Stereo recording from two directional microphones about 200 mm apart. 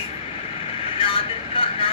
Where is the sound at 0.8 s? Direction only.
25° left (ahead or behind).